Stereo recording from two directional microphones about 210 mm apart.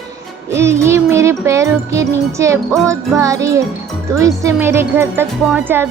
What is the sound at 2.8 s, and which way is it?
Speech, 15° right (ahead or behind).